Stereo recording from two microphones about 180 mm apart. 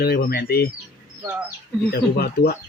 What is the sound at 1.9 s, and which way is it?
Speech, 60° left (ahead or behind).